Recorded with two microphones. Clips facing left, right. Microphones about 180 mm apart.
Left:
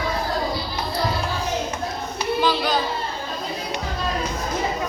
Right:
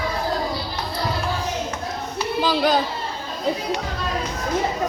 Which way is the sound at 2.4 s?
45° right (ahead or behind).